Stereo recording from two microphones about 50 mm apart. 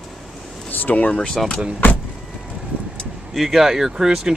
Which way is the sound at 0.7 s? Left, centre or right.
Left.